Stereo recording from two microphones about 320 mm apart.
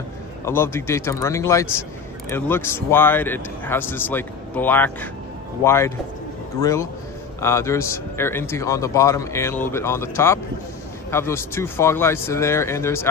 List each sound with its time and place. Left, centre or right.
0.4 s a man's voice: centre